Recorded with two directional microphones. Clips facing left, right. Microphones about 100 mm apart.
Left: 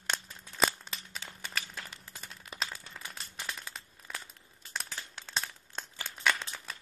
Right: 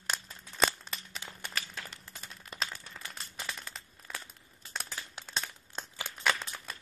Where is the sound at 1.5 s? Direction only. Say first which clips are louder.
Left 1 dB; centre (ahead or behind).